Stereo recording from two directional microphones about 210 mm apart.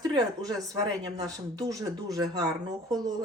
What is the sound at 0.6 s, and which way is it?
Speech, 15° right (ahead or behind).